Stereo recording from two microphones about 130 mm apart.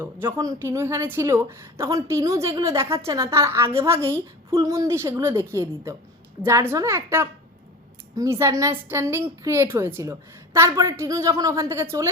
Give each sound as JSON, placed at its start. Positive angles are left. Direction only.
{"t": 0.0, "sound": "a woman's voice", "side_deg": -15}